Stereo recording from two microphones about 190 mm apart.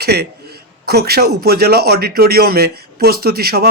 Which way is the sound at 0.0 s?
55° right (ahead or behind).